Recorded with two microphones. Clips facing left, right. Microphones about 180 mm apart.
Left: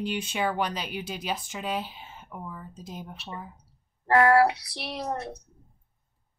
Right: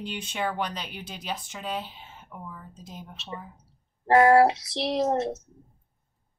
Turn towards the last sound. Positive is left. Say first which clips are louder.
# right 8 dB
turn(degrees=-25)  # may be behind; listen again after turning